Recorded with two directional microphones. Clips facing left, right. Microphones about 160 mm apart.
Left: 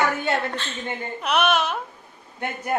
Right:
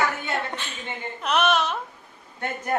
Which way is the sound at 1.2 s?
5° left (ahead or behind).